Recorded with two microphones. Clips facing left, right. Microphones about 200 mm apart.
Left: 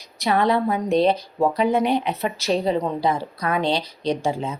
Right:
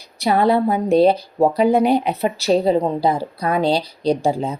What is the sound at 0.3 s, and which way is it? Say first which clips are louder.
Speech: right 4 dB; 35° right (ahead or behind).